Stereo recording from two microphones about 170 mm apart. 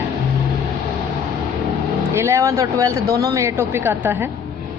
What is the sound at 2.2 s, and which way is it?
A woman's voice, 15° right (ahead or behind).